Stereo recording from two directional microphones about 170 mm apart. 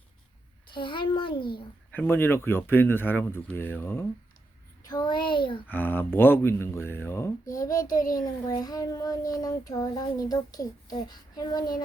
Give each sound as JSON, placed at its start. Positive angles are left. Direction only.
{"t": 0.7, "sound": "child singing", "side_deg": 30}
{"t": 1.9, "sound": "speech", "side_deg": 10}
{"t": 4.8, "sound": "a child's voice", "side_deg": 25}
{"t": 5.6, "sound": "speech", "side_deg": 10}
{"t": 7.9, "sound": "a child's voice", "side_deg": 55}
{"t": 8.1, "sound": "child singing", "side_deg": 20}